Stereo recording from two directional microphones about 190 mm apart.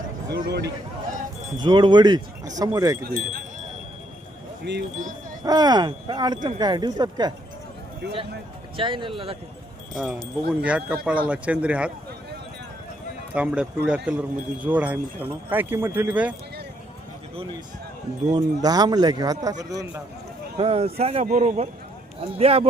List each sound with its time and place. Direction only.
0.3 s a man's voice: 60° right (ahead or behind)
1.5 s speech: 25° right (ahead or behind)
4.6 s a man's voice: 65° right (ahead or behind)
5.5 s speech: 20° right (ahead or behind)
8.0 s a man's voice: 60° right (ahead or behind)
8.7 s speech: 25° right (ahead or behind)
9.9 s wind chime: centre (ahead or behind)
10.6 s speech: 5° right (ahead or behind)
13.3 s speech: 5° right (ahead or behind)
18.3 s speech: 20° right (ahead or behind)
20.6 s speech: 30° right (ahead or behind)